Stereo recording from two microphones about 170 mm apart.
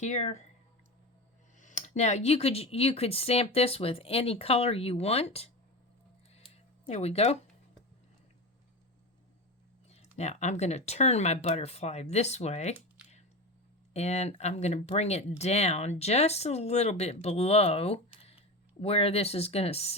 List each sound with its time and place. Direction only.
0.0 s speech: 40° left (ahead or behind)
1.5 s speech: 45° left (ahead or behind)
6.3 s a sound: 35° left (ahead or behind)
9.9 s speech: 40° left (ahead or behind)
13.9 s speech: 40° left (ahead or behind)